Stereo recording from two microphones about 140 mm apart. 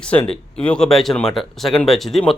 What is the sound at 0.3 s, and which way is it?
Speech, 5° left (ahead or behind).